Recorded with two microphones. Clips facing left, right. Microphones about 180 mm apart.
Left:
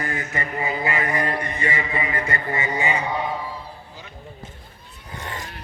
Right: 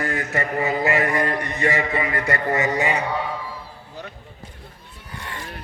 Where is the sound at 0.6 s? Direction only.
45° right (ahead or behind).